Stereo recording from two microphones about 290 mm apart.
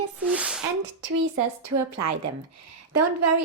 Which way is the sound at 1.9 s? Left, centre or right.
Right.